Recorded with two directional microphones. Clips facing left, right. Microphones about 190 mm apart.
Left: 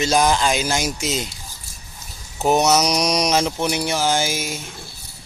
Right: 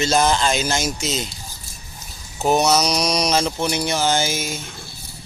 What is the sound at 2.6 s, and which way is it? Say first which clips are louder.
Speech: left 1 dB; 20° left (ahead or behind).